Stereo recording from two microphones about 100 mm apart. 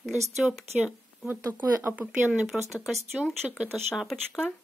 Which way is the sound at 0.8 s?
15° right (ahead or behind).